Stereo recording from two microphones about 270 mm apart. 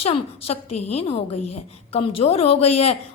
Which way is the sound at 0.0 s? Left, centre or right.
Left.